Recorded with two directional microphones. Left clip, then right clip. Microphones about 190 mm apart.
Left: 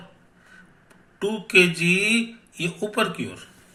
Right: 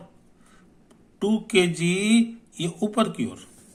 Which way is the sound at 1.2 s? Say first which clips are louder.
Left 4 dB; 35° right (ahead or behind).